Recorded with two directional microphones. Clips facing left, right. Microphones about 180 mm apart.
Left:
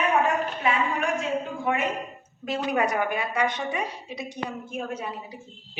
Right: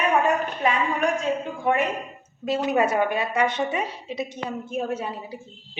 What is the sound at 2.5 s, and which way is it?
A woman's voice, 25° right (ahead or behind).